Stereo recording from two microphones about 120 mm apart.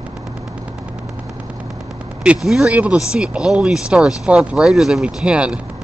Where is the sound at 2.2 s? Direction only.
5° right (ahead or behind).